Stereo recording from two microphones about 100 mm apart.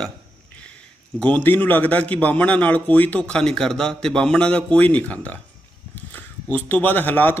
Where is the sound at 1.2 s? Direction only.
15° left (ahead or behind).